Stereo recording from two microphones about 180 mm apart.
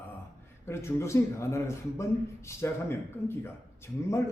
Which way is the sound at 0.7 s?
15° left (ahead or behind).